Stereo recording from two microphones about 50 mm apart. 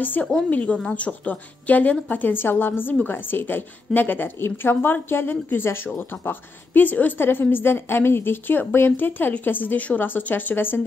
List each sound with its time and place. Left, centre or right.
0.0 s a woman's voice: left